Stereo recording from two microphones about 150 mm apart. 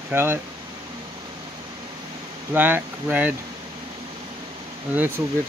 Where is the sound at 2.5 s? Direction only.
15° right (ahead or behind).